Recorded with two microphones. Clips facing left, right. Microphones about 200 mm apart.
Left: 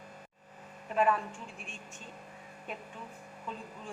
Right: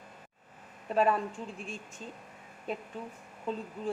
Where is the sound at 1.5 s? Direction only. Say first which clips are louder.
Right 7 dB; 35° right (ahead or behind).